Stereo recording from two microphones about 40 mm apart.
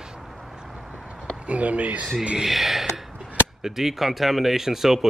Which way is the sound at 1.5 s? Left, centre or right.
Right.